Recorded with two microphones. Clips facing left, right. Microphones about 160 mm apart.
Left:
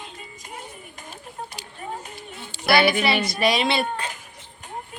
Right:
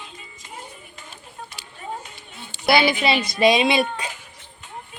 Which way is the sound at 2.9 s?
25° right (ahead or behind).